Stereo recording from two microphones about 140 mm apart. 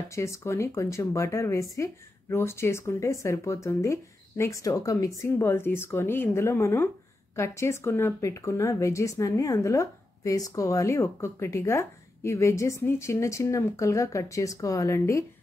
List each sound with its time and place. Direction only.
0.1 s speech: 20° left (ahead or behind)